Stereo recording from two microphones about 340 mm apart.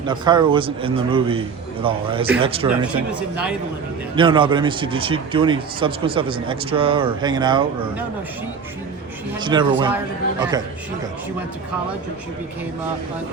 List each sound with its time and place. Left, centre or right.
0.0 s a man's voice: centre
2.6 s speech: centre
4.1 s a man's voice: centre
9.4 s a man's voice: centre